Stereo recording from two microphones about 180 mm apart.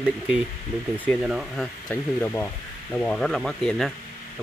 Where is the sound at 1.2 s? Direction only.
5° right (ahead or behind).